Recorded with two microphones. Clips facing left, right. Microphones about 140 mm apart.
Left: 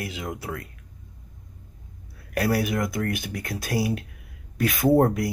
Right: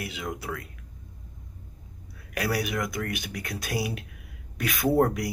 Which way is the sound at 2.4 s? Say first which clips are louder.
Left 4 dB; 40° left (ahead or behind).